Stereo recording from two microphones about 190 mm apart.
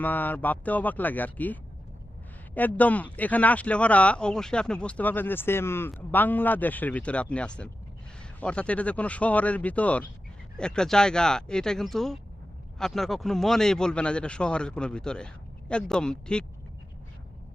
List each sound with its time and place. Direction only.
0.0 s speech: 10° left (ahead or behind)
2.6 s speech: 10° left (ahead or behind)